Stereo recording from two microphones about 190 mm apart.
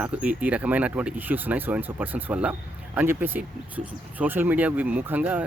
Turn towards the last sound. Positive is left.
turn(degrees=-10)  # may be behind; listen again after turning